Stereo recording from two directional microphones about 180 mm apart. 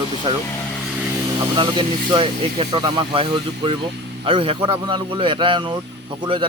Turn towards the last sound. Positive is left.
turn(degrees=-25)  # may be behind; listen again after turning